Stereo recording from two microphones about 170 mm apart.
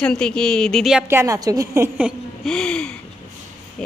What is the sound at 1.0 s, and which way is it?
A woman's voice, 15° right (ahead or behind).